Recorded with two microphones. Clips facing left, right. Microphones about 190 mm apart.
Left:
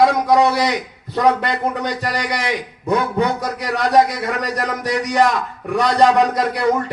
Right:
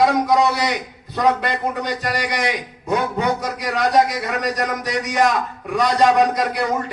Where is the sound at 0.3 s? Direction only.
60° left (ahead or behind).